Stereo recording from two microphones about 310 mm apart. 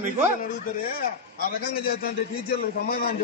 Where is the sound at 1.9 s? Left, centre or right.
Left.